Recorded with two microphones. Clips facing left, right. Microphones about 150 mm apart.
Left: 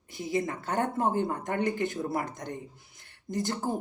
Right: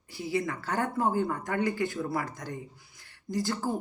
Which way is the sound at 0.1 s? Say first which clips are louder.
Even; 20° left (ahead or behind).